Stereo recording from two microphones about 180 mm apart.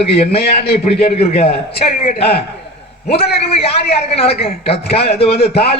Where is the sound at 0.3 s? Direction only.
35° left (ahead or behind).